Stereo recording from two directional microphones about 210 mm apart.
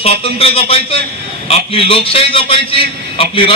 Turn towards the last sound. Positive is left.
turn(degrees=25)  # may be behind; listen again after turning